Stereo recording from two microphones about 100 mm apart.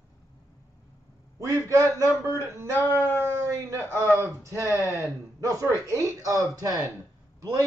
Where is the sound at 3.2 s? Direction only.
25° right (ahead or behind).